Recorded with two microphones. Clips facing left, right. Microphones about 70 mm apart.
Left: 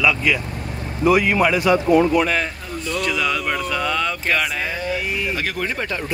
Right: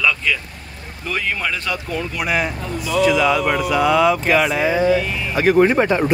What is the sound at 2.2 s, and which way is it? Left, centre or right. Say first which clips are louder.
Speech: even; centre.